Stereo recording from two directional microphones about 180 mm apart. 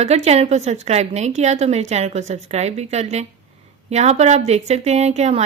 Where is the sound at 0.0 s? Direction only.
35° right (ahead or behind).